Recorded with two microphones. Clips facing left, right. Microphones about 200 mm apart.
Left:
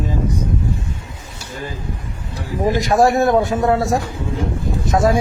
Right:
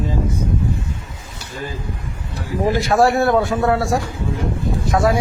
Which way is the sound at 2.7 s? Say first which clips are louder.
Left 1 dB; 15° left (ahead or behind).